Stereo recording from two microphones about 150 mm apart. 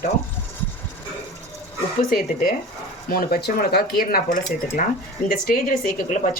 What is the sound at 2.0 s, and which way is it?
Speech, 80° left.